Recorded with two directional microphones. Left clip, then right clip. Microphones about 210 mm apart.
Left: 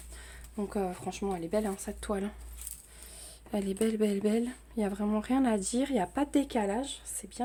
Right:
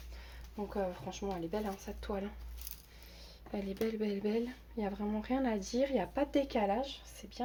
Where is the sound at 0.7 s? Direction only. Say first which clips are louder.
Left 3 dB; 60° left (ahead or behind).